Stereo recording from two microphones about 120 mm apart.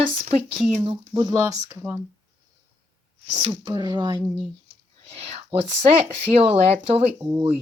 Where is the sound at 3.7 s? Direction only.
40° right (ahead or behind).